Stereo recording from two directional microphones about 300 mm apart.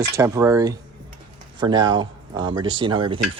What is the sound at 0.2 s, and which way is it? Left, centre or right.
Speech, centre.